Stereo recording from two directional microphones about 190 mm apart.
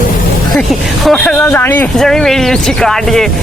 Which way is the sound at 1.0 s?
Centre (ahead or behind).